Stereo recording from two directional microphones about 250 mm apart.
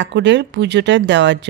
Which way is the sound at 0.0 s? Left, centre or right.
Right.